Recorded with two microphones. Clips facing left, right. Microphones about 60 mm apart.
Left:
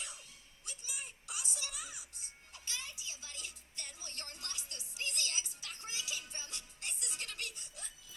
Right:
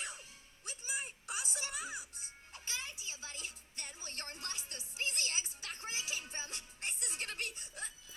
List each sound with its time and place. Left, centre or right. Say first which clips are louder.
0.0 s music: right 4 dB; right